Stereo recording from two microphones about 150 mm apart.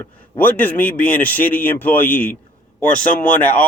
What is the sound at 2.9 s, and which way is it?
Speech, 65° left (ahead or behind).